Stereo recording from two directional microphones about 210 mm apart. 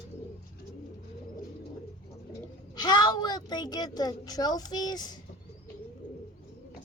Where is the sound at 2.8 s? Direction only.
20° left (ahead or behind).